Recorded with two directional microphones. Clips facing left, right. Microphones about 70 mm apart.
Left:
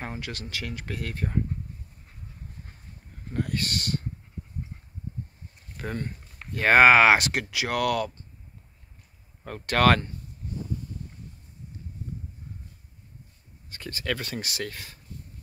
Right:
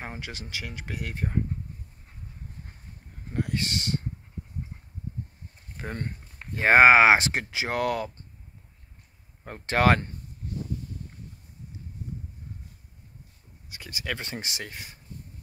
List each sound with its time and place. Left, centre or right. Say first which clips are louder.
0.0 s speech: left 2 dB; centre
3.3 s speech: even; centre
5.8 s speech: left 2 dB; right
9.4 s speech: left 1 dB; centre
13.7 s speech: left 3 dB; centre
14.2 s speech: left 3 dB; right